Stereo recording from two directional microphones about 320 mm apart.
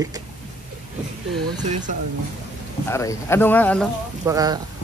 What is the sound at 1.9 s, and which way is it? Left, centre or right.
Speech, right.